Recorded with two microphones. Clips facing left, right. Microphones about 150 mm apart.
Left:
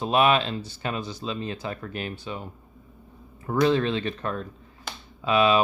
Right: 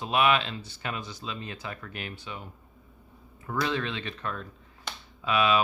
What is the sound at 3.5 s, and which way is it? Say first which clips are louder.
Speech: left 8 dB; 35° left (ahead or behind).